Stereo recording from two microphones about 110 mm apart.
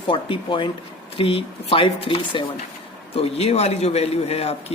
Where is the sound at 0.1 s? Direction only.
50° left (ahead or behind).